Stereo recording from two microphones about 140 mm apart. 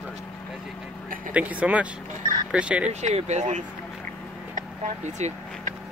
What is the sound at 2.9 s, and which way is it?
Speech, 55° right (ahead or behind).